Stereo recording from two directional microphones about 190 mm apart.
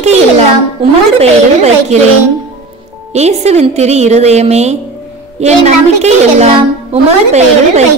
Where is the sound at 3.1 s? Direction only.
35° right (ahead or behind).